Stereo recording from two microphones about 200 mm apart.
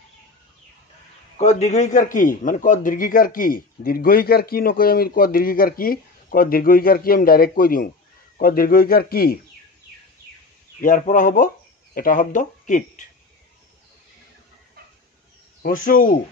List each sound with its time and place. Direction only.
1.4 s a man's voice: 35° left (ahead or behind)
10.8 s speech: 40° left (ahead or behind)
15.6 s a man's voice: 45° left (ahead or behind)